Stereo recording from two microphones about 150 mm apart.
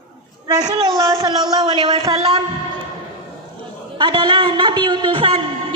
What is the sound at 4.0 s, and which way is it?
A man's voice, 30° right (ahead or behind).